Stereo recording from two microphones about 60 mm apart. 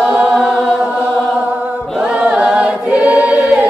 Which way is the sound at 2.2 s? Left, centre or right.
Centre.